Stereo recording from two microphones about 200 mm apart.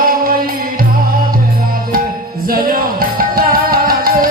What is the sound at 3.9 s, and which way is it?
Music, 45° right (ahead or behind).